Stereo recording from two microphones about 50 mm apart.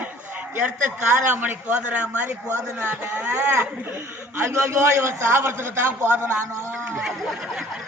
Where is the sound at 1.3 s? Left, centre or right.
Right.